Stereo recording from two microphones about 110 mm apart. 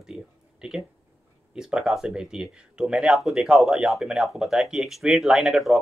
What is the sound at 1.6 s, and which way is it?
Speech, 5° right (ahead or behind).